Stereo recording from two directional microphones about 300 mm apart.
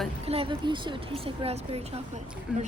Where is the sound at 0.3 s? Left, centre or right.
Centre.